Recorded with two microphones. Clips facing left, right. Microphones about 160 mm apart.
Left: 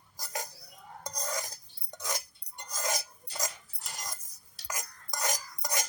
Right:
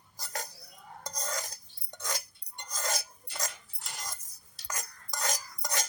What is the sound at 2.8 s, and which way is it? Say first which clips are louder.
Filing: left 1 dB; 20° left (ahead or behind).